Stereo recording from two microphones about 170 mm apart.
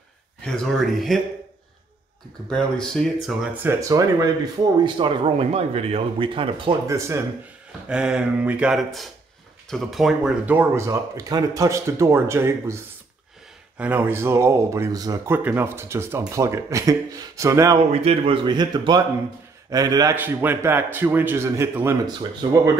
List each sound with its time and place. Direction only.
0.4 s speech: 5° left (ahead or behind)
2.5 s speech: 5° left (ahead or behind)
3.6 s a man's voice: 20° right (ahead or behind)
4.8 s speech: 30° right (ahead or behind)
6.9 s speech: 15° right (ahead or behind)
7.9 s speech: 5° right (ahead or behind)
13.7 s speech: 10° right (ahead or behind)
18.0 s a man's voice: 35° right (ahead or behind)
20.2 s speech: 10° right (ahead or behind)